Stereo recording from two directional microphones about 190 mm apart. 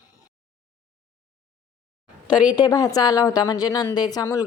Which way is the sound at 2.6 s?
20° left (ahead or behind).